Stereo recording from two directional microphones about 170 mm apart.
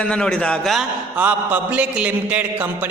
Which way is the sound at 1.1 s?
10° right (ahead or behind).